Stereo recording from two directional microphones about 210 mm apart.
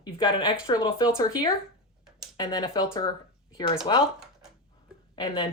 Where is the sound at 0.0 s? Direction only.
20° left (ahead or behind).